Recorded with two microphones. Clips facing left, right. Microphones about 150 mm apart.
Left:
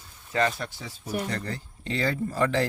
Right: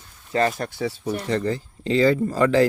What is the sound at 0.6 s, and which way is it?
Speech, 65° right (ahead or behind).